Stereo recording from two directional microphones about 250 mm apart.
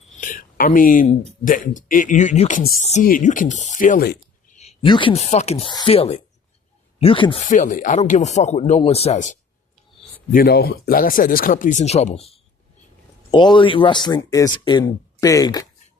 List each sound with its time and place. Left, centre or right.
0.2 s a sound: left
1.5 s speech: left
4.6 s speech: left
10.3 s speech: left; by 15.6 s centre